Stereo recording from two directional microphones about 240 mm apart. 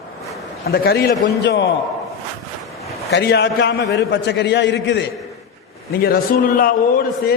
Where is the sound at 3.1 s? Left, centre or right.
Left.